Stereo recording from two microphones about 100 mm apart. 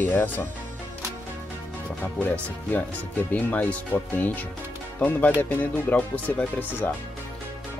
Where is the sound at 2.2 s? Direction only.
15° left (ahead or behind).